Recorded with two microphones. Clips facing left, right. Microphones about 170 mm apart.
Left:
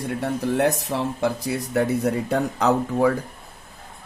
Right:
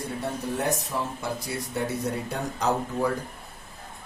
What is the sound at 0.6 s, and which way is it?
Speech, 80° left.